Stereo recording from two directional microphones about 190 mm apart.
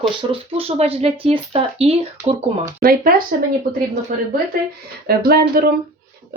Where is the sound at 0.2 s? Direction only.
30° right (ahead or behind).